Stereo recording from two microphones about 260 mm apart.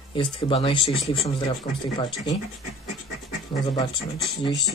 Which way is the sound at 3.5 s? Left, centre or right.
Centre.